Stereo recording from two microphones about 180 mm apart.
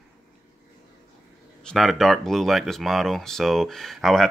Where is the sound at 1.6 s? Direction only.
Centre (ahead or behind).